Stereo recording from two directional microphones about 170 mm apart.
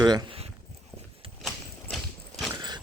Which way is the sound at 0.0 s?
25° right (ahead or behind).